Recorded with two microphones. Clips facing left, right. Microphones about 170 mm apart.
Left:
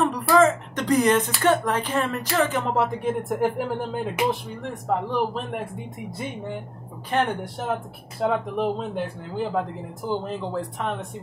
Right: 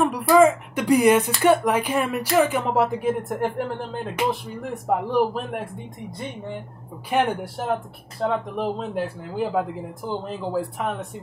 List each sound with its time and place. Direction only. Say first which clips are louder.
0.0 s a sound: right 2 dB; 10° right (ahead or behind)
1.4 s speech: right 3 dB; 10° right (ahead or behind); by 4.4 s 5° left (ahead or behind)
4.6 s speech: right 2 dB; 5° right (ahead or behind)